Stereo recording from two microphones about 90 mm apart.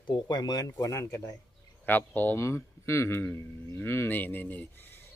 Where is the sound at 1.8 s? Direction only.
20° left (ahead or behind).